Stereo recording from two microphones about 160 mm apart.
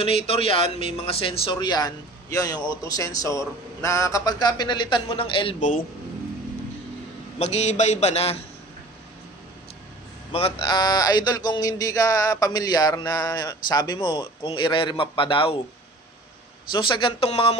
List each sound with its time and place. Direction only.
0.0 s speech: 35° left (ahead or behind)
7.3 s a man's voice: 45° left (ahead or behind)
10.3 s speech: 35° left (ahead or behind)
16.7 s speech: 30° left (ahead or behind)